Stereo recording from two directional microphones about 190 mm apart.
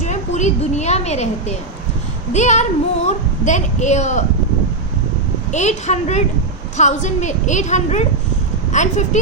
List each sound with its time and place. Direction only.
0.0 s a woman's voice: 40° left (ahead or behind)
5.5 s a woman's voice: 40° left (ahead or behind)